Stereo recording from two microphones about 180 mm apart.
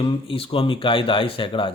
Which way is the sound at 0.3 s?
30° left (ahead or behind).